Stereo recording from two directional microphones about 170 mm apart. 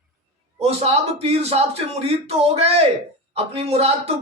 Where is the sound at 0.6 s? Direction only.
35° right (ahead or behind).